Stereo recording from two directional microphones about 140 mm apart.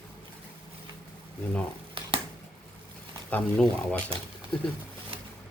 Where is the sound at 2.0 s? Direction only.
40° right (ahead or behind).